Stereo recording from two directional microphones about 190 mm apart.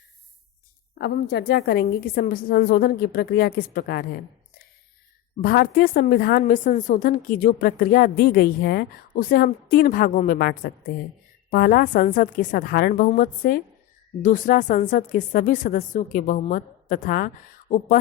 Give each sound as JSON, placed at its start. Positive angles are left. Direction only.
{"t": 0.9, "sound": "a woman's voice", "side_deg": 60}
{"t": 5.4, "sound": "a woman's voice", "side_deg": 50}
{"t": 6.4, "sound": "a woman's voice", "side_deg": 45}